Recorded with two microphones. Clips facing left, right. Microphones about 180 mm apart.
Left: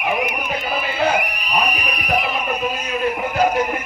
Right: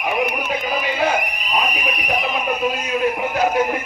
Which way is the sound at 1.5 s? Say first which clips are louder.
Even; centre (ahead or behind).